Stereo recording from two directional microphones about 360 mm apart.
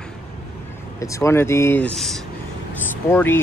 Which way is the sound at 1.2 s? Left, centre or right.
Centre.